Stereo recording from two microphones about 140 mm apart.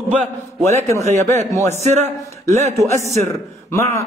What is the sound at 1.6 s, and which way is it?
A man's voice, 55° right (ahead or behind).